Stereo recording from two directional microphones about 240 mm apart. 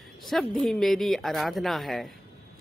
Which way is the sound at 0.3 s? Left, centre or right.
Centre.